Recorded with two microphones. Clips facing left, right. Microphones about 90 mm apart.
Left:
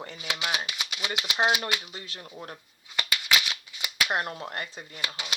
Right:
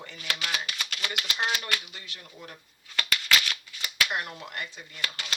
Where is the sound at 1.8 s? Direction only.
35° left (ahead or behind).